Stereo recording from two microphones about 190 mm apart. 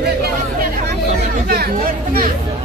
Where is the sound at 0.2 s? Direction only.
55° right (ahead or behind).